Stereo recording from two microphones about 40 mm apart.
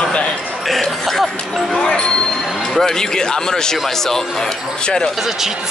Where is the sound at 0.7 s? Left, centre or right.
Centre.